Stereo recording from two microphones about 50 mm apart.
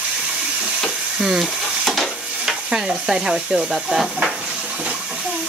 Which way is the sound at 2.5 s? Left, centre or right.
Centre.